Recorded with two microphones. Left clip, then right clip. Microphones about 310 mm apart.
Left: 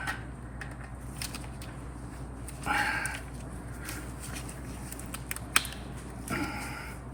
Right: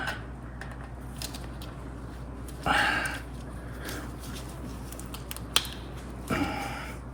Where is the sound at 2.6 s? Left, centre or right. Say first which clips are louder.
Right 4 dB; right.